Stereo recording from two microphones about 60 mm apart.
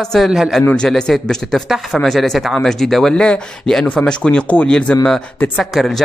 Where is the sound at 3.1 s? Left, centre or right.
Centre.